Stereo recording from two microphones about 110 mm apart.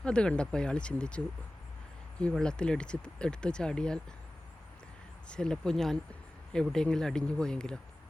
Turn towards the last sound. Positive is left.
turn(degrees=5)  # may be behind; listen again after turning